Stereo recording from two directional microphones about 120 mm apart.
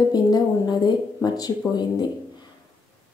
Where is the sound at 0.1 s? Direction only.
35° left (ahead or behind).